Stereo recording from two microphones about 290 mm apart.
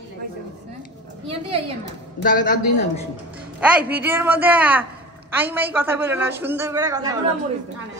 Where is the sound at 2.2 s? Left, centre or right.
Left.